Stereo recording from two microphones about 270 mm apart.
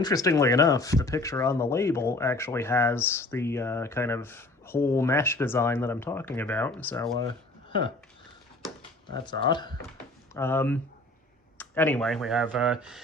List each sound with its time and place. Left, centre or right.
0.0 s speech: centre
7.7 s speech: centre
9.1 s speech: centre